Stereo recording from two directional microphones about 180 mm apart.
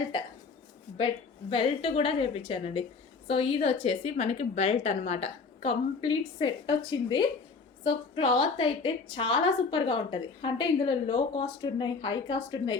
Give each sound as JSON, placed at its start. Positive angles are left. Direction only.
{"t": 0.9, "sound": "a woman's voice", "side_deg": 30}